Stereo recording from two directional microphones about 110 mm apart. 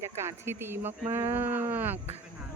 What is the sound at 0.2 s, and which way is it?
Speech, 25° right (ahead or behind).